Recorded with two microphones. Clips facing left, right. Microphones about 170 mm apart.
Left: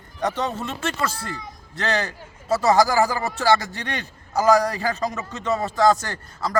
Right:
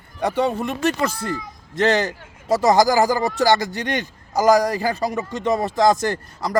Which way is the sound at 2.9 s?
35° right (ahead or behind).